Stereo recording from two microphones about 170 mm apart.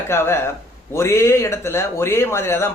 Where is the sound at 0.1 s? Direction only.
15° left (ahead or behind).